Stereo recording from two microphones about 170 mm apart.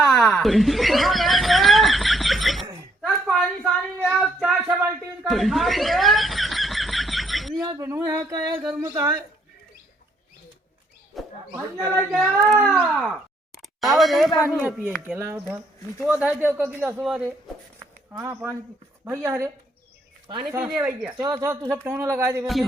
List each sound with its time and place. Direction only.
0.0 s chuckle: 5° left (ahead or behind)
3.0 s a sound: centre (ahead or behind)
4.7 s chuckle: 10° right (ahead or behind)
7.6 s speech: 20° right (ahead or behind)
11.1 s a sound: centre (ahead or behind)
12.4 s cat: 20° right (ahead or behind)
12.6 s a sound: centre (ahead or behind)
13.6 s speech: centre (ahead or behind)
17.0 s a sound: 5° right (ahead or behind)
18.2 s speech: 10° right (ahead or behind)
20.7 s speech: 5° right (ahead or behind)
21.1 s speech: 25° right (ahead or behind)